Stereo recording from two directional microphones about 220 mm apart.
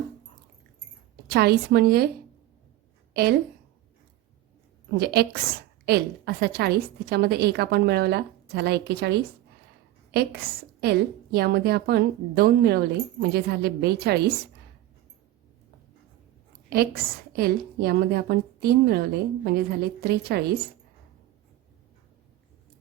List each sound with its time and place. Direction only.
1.3 s a woman's voice: 45° right (ahead or behind)
3.1 s a woman's voice: 45° right (ahead or behind)
4.9 s a woman's voice: 45° right (ahead or behind)
16.6 s a woman's voice: 45° right (ahead or behind)